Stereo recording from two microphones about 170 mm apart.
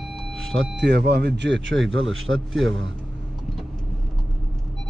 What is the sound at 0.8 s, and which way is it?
Speech, 75° right (ahead or behind).